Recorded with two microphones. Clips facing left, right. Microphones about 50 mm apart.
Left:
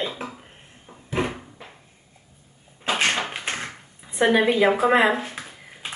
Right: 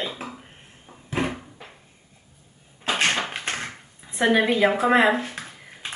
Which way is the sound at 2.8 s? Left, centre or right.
Centre.